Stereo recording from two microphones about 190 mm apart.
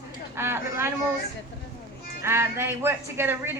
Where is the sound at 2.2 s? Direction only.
15° right (ahead or behind).